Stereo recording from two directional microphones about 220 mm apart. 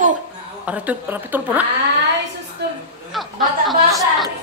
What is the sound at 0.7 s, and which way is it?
A woman's voice, 5° right (ahead or behind).